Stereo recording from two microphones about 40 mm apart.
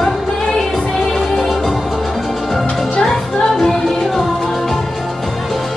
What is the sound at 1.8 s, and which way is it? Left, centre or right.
Music, centre.